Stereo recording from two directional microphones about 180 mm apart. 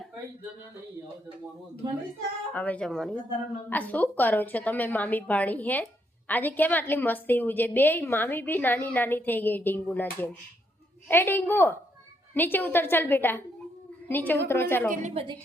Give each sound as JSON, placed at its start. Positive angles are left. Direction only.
{"t": 2.5, "sound": "a woman's voice", "side_deg": 10}
{"t": 14.8, "sound": "a woman's voice", "side_deg": -35}